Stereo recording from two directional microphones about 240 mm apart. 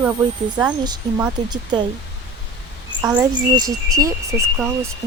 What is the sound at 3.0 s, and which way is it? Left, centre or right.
Speech, centre.